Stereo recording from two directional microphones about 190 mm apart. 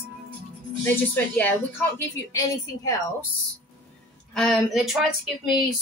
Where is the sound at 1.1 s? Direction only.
10° left (ahead or behind).